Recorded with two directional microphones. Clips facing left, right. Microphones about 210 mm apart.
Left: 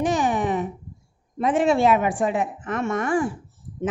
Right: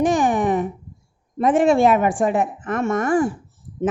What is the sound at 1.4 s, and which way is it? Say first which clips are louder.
A woman's voice: right 4 dB; 50° right (ahead or behind).